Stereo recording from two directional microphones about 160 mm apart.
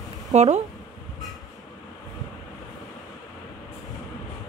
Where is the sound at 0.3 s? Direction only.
45° right (ahead or behind).